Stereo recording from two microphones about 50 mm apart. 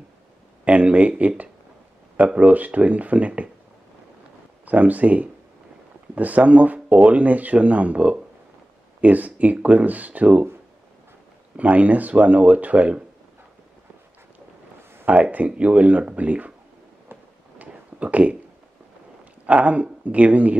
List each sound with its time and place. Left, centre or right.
0.7 s speech: right
4.6 s speech: right
11.5 s speech: right
15.0 s speech: right
17.6 s a sound: right
19.4 s speech: right